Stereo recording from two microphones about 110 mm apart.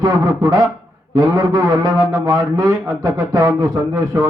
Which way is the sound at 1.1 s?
25° right (ahead or behind).